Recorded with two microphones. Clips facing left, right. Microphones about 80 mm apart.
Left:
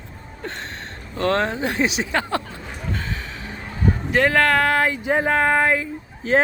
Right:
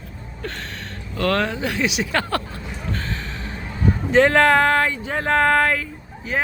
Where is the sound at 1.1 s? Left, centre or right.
Left.